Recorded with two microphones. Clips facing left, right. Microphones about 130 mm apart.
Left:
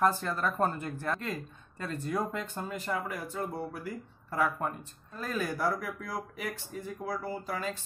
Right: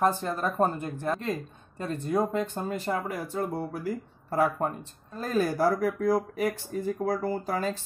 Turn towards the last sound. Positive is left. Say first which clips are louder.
# right 6 dB
turn(degrees=-40)  # may be behind; listen again after turning